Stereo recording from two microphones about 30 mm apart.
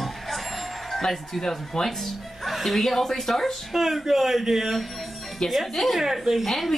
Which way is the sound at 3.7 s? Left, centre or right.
Centre.